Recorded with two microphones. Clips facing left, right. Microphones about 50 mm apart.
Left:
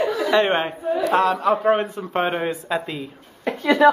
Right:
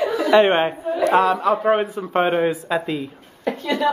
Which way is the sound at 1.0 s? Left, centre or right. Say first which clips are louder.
Right 3 dB; centre.